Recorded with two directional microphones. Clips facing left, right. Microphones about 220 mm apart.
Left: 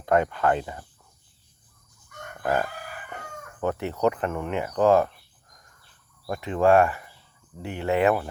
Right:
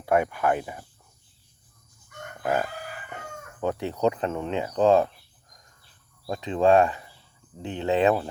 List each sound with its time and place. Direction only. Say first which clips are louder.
0.0 s speech: left 1 dB; 10° right (ahead or behind)
2.4 s chicken: left 1 dB; 10° right (ahead or behind)
3.6 s speech: even; 15° right (ahead or behind)
6.2 s speech: even; 20° right (ahead or behind)